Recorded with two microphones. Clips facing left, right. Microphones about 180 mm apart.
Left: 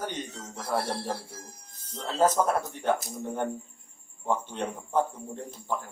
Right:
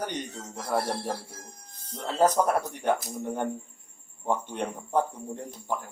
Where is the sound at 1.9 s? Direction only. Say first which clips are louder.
Right 1 dB; 15° right (ahead or behind).